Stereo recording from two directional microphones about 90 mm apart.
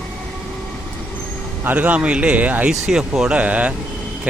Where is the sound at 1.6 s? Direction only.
20° right (ahead or behind).